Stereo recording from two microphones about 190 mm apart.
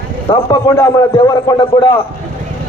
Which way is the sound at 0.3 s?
20° left (ahead or behind).